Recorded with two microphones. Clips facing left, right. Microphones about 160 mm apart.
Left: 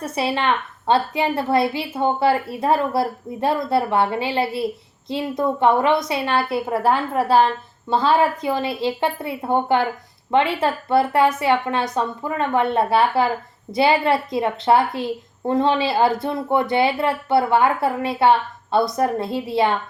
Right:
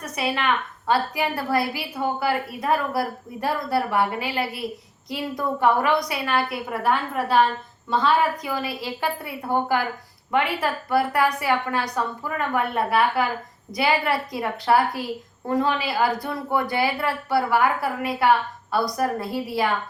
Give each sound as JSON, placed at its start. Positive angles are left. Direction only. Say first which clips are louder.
{"t": 0.0, "sound": "a woman's voice", "louder": "left 4 dB", "side_deg": 30}